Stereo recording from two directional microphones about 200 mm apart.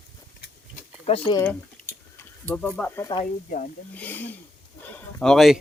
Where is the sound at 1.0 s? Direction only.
25° left (ahead or behind).